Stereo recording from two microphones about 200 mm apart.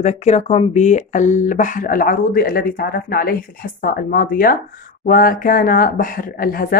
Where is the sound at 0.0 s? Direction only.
35° left (ahead or behind).